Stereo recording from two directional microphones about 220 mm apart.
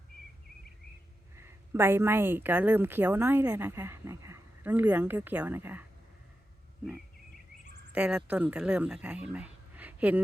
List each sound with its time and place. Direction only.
1.4 s speech: 10° right (ahead or behind)
7.9 s speech: 5° right (ahead or behind)